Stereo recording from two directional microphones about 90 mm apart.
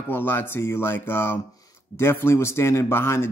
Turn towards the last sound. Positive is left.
turn(degrees=25)  # may be behind; listen again after turning